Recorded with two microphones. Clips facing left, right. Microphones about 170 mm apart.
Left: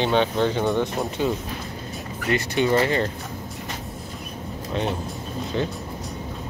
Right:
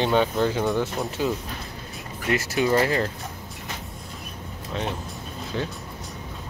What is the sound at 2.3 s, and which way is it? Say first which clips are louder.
Speech: left 1 dB; centre (ahead or behind).